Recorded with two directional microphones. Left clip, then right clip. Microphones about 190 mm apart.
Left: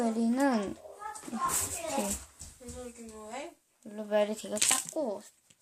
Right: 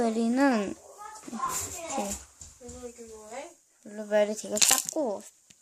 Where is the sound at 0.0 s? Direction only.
35° right (ahead or behind).